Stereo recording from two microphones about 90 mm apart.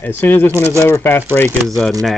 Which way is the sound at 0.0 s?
25° left (ahead or behind).